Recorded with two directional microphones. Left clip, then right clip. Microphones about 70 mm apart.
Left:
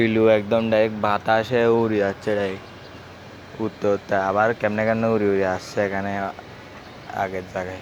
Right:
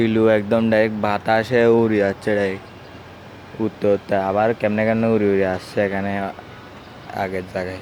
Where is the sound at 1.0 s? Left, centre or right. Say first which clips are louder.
Right 1 dB; right.